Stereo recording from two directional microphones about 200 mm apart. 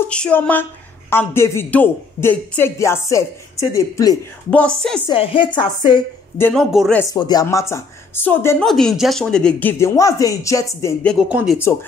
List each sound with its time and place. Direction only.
0.1 s a man's voice: 5° left (ahead or behind)
4.5 s a man's voice: 5° left (ahead or behind)
5.0 s a woman's voice: 25° left (ahead or behind)
6.3 s a man's voice: 5° left (ahead or behind)
7.0 s a man's voice: 20° left (ahead or behind)
11.1 s speech: 5° right (ahead or behind)